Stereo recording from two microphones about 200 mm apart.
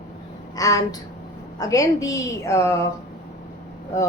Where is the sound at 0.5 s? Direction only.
15° left (ahead or behind).